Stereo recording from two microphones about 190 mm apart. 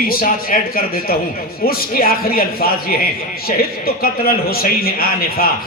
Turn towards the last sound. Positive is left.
turn(degrees=50)  # may be behind; listen again after turning